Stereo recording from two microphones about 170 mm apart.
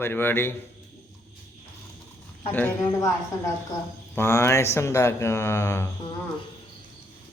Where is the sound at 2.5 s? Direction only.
10° left (ahead or behind).